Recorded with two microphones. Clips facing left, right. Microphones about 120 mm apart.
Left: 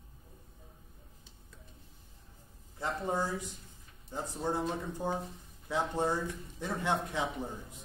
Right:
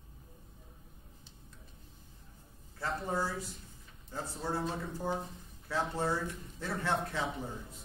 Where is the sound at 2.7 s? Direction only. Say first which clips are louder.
Left 2 dB; 20° left (ahead or behind).